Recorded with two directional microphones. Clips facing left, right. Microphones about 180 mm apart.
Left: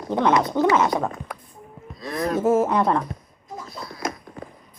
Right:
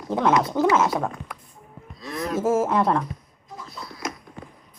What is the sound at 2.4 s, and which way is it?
Speech, centre (ahead or behind).